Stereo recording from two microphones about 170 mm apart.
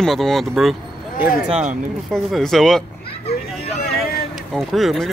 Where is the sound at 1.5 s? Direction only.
45° right (ahead or behind).